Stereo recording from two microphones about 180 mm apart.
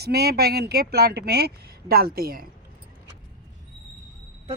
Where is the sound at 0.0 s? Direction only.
60° right (ahead or behind).